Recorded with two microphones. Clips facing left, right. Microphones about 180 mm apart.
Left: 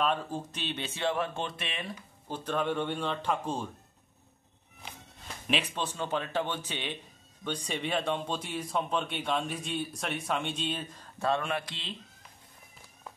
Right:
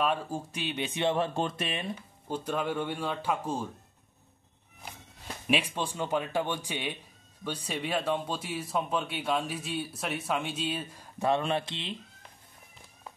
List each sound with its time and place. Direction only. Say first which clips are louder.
0.0 s speech: right 1 dB; 10° right (ahead or behind); by 1.4 s 30° right (ahead or behind)
1.4 s speech: right 5 dB; 40° right (ahead or behind)
2.2 s speech: even; 10° right (ahead or behind)
5.5 s speech: right 2 dB; 10° right (ahead or behind)